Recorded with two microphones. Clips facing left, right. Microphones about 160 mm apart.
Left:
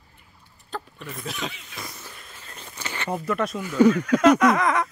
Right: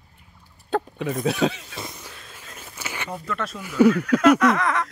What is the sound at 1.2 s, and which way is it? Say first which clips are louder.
Speech: right 11 dB; 80° right.